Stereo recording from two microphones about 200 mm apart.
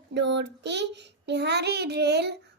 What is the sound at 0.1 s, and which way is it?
A child's voice, 60° right (ahead or behind).